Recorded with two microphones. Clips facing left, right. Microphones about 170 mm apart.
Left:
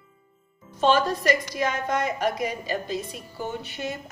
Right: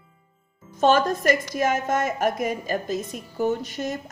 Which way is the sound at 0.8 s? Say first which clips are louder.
Right 2 dB; 45° right (ahead or behind).